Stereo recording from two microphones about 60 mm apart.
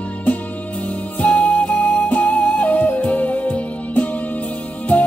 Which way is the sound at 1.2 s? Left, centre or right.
Left.